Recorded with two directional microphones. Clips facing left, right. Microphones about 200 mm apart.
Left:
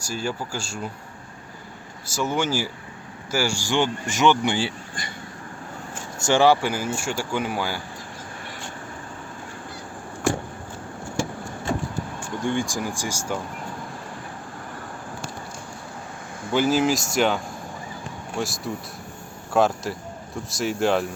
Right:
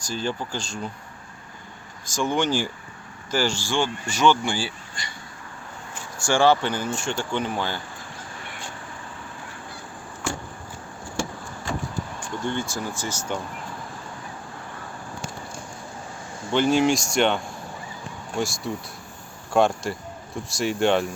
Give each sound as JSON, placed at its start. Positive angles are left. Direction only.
{"t": 0.0, "sound": "speech", "side_deg": 10}
{"t": 2.0, "sound": "speech", "side_deg": 5}
{"t": 6.1, "sound": "speech", "side_deg": 20}
{"t": 12.4, "sound": "speech", "side_deg": 15}
{"t": 16.5, "sound": "speech", "side_deg": 5}